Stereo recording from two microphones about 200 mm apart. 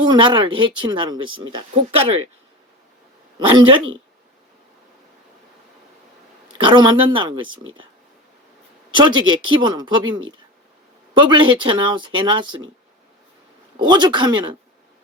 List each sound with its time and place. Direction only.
0.0 s speech: 25° right (ahead or behind)
3.3 s speech: 25° right (ahead or behind)
6.5 s speech: 25° right (ahead or behind)
8.9 s speech: 20° right (ahead or behind)
13.7 s speech: 20° right (ahead or behind)